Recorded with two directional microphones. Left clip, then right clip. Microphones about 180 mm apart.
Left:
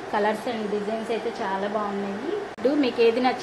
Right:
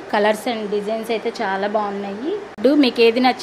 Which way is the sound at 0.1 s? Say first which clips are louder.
Right 7 dB; 55° right (ahead or behind).